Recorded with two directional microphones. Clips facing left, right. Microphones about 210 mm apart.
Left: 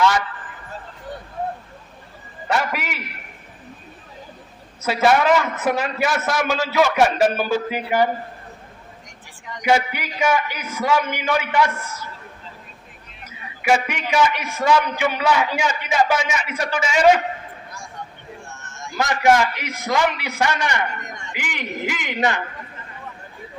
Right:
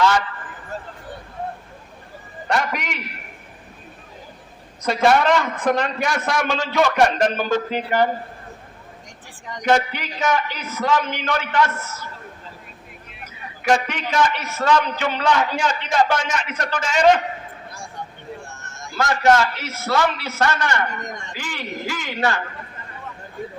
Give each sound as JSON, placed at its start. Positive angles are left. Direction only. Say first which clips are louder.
{"t": 2.5, "sound": "a man's voice", "louder": "even", "side_deg": 5}
{"t": 4.8, "sound": "a man's voice", "louder": "even", "side_deg": 5}
{"t": 9.6, "sound": "a man's voice", "louder": "even", "side_deg": 10}
{"t": 13.2, "sound": "a man's voice", "louder": "even", "side_deg": 10}
{"t": 18.9, "sound": "a man's voice", "louder": "even", "side_deg": 15}